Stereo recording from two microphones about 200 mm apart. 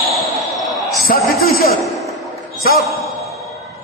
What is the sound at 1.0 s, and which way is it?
Speech, 50° left (ahead or behind).